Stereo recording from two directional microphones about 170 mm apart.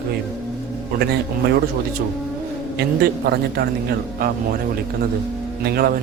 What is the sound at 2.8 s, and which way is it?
A man's voice, 70° right (ahead or behind).